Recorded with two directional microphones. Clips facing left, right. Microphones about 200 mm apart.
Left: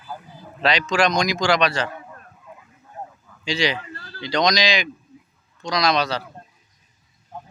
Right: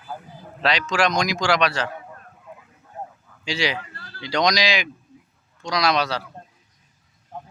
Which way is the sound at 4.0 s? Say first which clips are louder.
Left 3 dB; 35° left (ahead or behind).